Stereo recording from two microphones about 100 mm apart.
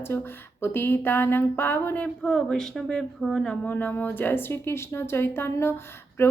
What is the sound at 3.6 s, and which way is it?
A woman's voice, 15° left (ahead or behind).